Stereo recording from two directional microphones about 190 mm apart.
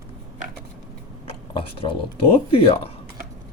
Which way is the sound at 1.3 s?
30° left (ahead or behind).